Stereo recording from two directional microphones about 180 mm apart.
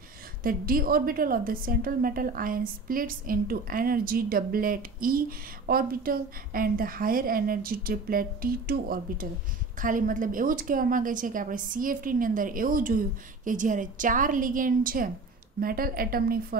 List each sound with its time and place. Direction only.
0.4 s a woman's voice: 50° right (ahead or behind)